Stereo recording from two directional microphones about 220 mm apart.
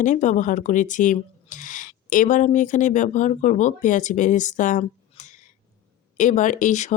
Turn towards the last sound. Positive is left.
turn(degrees=35)  # may be behind; listen again after turning